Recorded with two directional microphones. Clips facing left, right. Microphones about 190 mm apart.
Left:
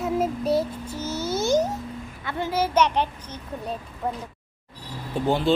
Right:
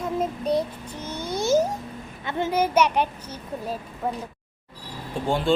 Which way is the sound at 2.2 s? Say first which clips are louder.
Right 2 dB; 20° right (ahead or behind).